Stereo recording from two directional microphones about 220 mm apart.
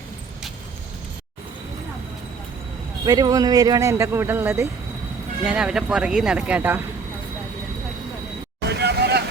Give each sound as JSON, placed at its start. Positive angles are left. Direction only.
{"t": 3.1, "sound": "speech", "side_deg": -15}
{"t": 8.6, "sound": "vehicle", "side_deg": -50}